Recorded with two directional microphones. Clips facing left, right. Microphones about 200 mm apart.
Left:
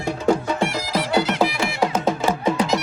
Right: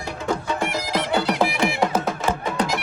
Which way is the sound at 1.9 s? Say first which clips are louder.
Left 2 dB; 10° left (ahead or behind).